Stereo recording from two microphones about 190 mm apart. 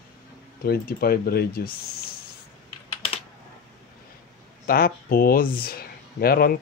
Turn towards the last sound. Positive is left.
turn(degrees=50)  # may be behind; listen again after turning